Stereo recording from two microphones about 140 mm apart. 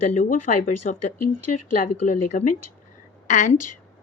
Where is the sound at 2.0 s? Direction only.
65° left (ahead or behind).